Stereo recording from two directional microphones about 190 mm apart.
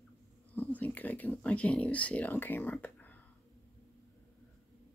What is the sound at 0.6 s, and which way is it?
Speech, 10° left (ahead or behind).